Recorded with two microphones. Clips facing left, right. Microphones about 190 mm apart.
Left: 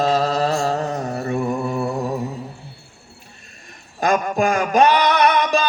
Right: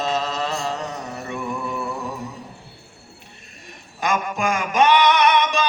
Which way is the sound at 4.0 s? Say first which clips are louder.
Left 5 dB; 40° left (ahead or behind).